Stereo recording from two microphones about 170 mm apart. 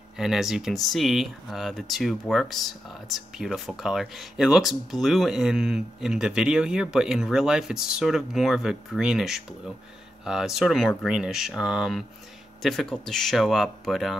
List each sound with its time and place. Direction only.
0.2 s speech: centre (ahead or behind)